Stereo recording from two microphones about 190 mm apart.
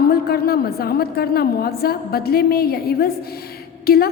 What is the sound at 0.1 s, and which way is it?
A woman's voice, 55° left (ahead or behind).